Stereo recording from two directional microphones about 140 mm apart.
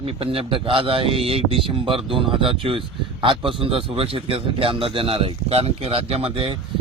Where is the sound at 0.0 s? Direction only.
40° right (ahead or behind).